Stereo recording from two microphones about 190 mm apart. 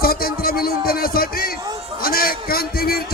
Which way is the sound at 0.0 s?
50° left (ahead or behind).